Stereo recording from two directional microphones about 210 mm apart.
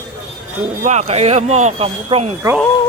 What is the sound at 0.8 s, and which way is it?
Speech, 35° right (ahead or behind).